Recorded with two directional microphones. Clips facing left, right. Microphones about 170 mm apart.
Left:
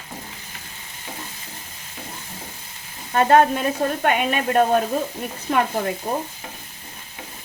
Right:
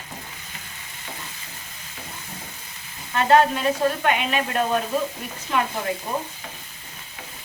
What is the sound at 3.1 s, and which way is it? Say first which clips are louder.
Speech: left 2 dB; 45° left (ahead or behind).